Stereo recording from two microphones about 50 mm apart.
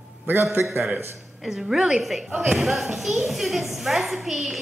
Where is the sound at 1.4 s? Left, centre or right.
Centre.